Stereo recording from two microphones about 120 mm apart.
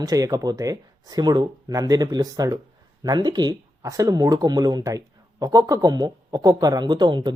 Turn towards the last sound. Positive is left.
turn(degrees=-35)  # may be behind; listen again after turning